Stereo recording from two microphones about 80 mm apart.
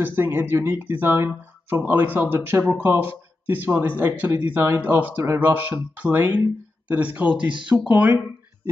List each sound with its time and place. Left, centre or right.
0.0 s speech: right